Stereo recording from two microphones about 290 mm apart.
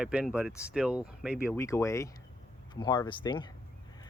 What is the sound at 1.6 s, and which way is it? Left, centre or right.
Speech, centre.